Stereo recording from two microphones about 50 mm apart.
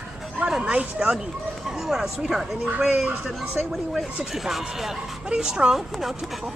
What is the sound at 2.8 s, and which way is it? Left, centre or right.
Speech, centre.